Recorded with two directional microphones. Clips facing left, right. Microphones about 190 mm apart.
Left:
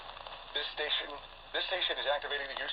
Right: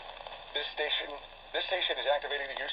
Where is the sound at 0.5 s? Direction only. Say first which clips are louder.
Right 4 dB; 20° right (ahead or behind).